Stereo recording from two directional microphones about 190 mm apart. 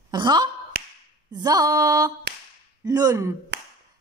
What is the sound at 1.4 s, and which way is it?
Speech, 20° right (ahead or behind).